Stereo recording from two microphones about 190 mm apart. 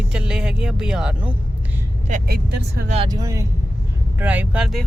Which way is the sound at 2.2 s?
55° right (ahead or behind).